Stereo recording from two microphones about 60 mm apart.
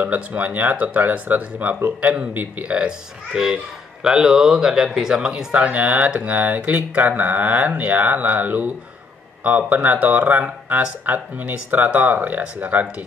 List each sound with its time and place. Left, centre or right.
0.0 s speech: right
3.3 s speech: centre